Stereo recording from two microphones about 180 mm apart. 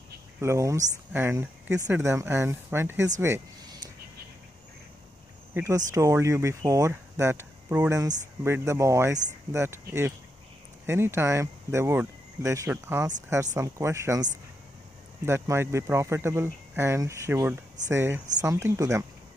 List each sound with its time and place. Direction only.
0.4 s speech: 15° right (ahead or behind)
3.2 s a sound: 15° right (ahead or behind)
5.5 s speech: 15° right (ahead or behind)
15.2 s speech: 15° right (ahead or behind)